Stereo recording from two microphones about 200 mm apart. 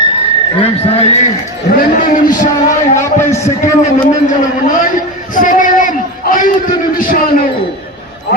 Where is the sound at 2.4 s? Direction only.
15° left (ahead or behind).